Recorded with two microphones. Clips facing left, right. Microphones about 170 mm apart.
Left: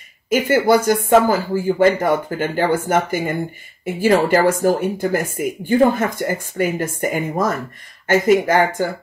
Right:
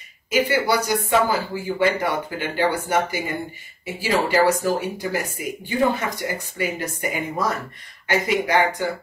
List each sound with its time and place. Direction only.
0.3 s speech: 50° left (ahead or behind)